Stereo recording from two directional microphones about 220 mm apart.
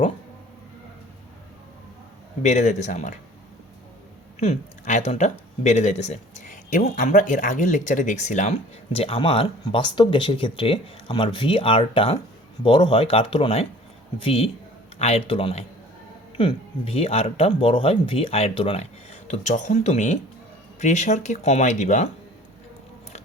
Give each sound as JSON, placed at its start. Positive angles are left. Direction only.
{"t": 2.4, "sound": "speech", "side_deg": 30}
{"t": 4.4, "sound": "speech", "side_deg": 30}